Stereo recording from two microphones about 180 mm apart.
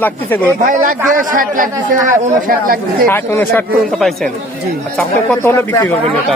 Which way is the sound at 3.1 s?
10° left (ahead or behind).